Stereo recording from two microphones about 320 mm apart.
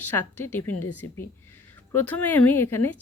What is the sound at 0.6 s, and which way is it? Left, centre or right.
Speech, left.